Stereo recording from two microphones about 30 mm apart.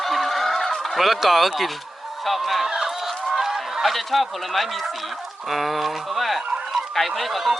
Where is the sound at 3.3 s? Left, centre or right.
Centre.